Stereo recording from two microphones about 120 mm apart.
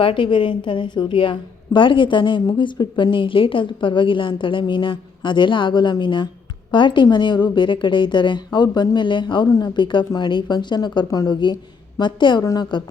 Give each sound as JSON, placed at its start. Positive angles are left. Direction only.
{"t": 0.0, "sound": "a woman's voice", "side_deg": 45}